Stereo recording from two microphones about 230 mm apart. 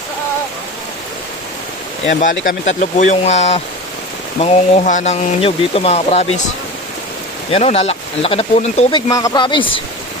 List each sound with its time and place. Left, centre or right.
2.0 s speech: left
7.5 s speech: left